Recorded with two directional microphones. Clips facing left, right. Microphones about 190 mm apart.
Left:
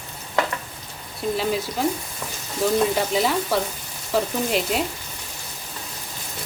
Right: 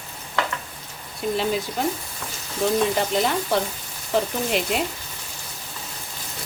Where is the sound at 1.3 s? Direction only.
Centre (ahead or behind).